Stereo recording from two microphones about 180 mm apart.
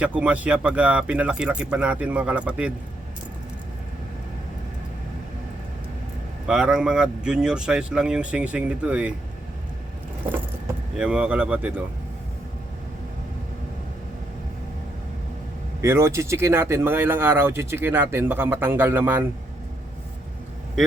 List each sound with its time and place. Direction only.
0.0 s speech: 5° right (ahead or behind)
6.5 s speech: 5° right (ahead or behind)
10.9 s speech: 5° right (ahead or behind)
15.8 s speech: 15° right (ahead or behind)